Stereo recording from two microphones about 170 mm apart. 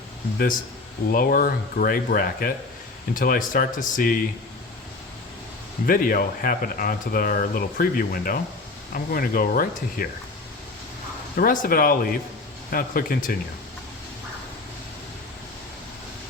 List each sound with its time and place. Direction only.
0.3 s speech: 55° left (ahead or behind)
5.8 s speech: 55° left (ahead or behind)
11.3 s speech: 55° left (ahead or behind)